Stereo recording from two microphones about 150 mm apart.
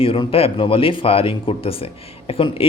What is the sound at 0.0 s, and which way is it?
Speech, 35° left (ahead or behind).